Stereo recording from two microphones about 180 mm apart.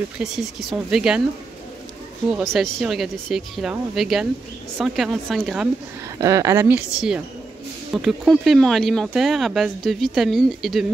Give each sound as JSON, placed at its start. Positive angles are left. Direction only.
{"t": 0.2, "sound": "speech", "side_deg": 0}
{"t": 2.3, "sound": "speech", "side_deg": 0}
{"t": 6.1, "sound": "speech", "side_deg": -15}
{"t": 7.9, "sound": "speech", "side_deg": 0}